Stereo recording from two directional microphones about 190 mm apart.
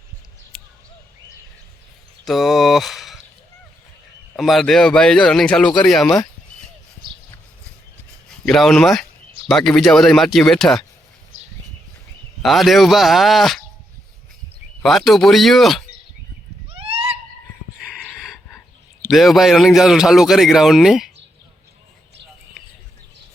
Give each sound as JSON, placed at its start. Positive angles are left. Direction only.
{"t": 2.2, "sound": "speech", "side_deg": 0}
{"t": 4.4, "sound": "a man's voice", "side_deg": 0}
{"t": 8.4, "sound": "a man's voice", "side_deg": 0}
{"t": 12.4, "sound": "a man's voice", "side_deg": 0}
{"t": 14.8, "sound": "a man's voice", "side_deg": 0}
{"t": 16.6, "sound": "a sound", "side_deg": -30}
{"t": 17.7, "sound": "a sound", "side_deg": 0}
{"t": 19.1, "sound": "a man's voice", "side_deg": 0}